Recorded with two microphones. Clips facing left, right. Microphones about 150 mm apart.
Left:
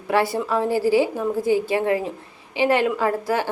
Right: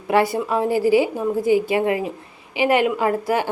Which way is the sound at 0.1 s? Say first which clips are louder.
Right 2 dB; 15° right (ahead or behind).